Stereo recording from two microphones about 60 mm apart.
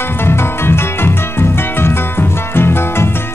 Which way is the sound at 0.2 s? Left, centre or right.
Left.